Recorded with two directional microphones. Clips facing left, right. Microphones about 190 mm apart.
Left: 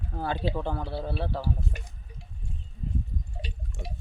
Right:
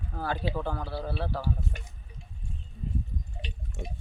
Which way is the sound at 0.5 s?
20° left (ahead or behind).